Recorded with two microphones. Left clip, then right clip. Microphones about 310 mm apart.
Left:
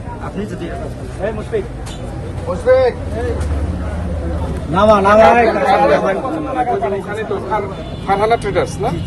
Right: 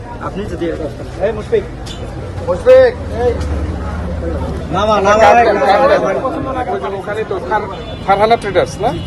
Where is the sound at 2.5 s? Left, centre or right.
Right.